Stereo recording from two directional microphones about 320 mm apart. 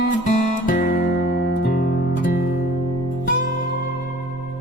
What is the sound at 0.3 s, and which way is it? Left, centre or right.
Music, left.